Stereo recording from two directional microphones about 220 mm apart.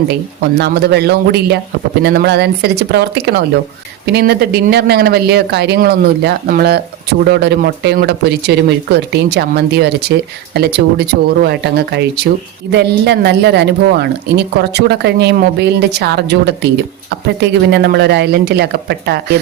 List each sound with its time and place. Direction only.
0.5 s speech: 50° right (ahead or behind)